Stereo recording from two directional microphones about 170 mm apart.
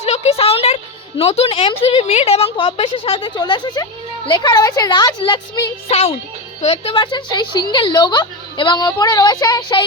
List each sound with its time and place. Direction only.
0.0 s a sound: 40° left (ahead or behind)
1.2 s a woman's voice: 35° left (ahead or behind)
5.9 s a woman's voice: 40° left (ahead or behind); by 9.8 s 25° left (ahead or behind)